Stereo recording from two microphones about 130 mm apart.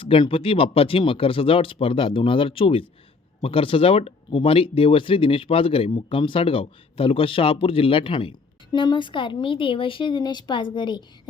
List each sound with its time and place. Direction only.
0.0 s speech: 45° left (ahead or behind)